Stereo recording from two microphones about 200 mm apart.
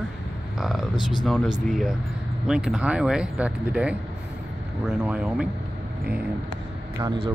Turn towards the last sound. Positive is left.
turn(degrees=-25)  # may be behind; listen again after turning